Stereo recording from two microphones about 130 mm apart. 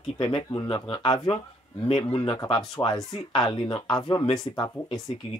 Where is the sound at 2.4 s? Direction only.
35° left (ahead or behind).